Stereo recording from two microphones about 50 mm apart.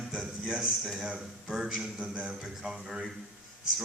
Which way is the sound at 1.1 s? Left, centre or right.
Centre.